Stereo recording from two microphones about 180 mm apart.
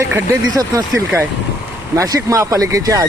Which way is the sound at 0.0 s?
15° right (ahead or behind).